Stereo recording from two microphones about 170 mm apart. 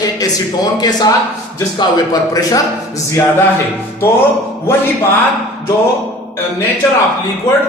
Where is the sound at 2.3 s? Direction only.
20° left (ahead or behind).